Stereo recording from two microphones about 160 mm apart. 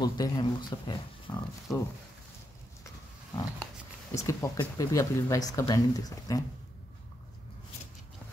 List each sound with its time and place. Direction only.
0.0 s speech: 25° left (ahead or behind)
4.1 s speech: 20° left (ahead or behind)